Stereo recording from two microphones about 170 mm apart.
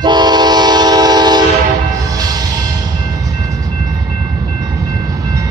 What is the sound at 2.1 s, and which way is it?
Music, 25° right (ahead or behind).